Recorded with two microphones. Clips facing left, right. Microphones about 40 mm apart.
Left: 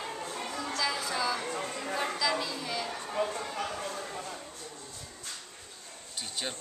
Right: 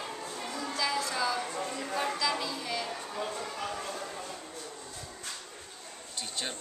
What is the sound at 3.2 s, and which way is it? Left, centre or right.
Speech, left.